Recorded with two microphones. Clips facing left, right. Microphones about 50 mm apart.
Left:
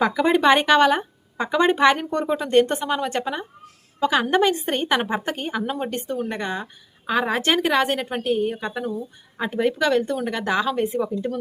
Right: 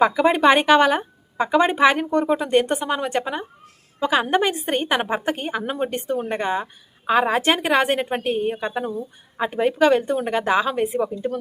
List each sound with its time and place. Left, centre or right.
0.0 s a woman's voice: centre